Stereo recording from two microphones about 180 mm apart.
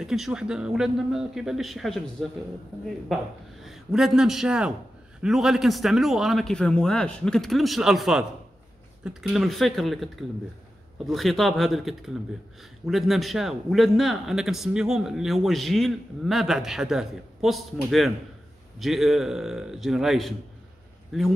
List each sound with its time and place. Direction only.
0.0 s speech: centre (ahead or behind)
3.6 s a man's voice: centre (ahead or behind)